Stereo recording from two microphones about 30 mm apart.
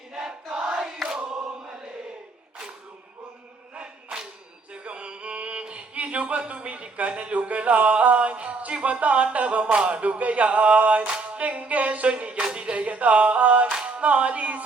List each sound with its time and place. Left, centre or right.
0.1 s a sound: right
1.0 s choir: centre
4.7 s music: right
5.9 s speech: right
6.5 s music: right
9.9 s music: right
12.0 s music: right
12.4 s a sound: right
12.7 s music: right